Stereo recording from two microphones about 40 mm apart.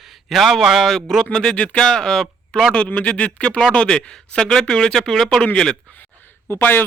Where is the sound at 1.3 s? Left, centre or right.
Centre.